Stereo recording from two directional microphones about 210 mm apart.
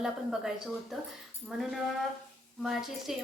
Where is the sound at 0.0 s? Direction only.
Centre (ahead or behind).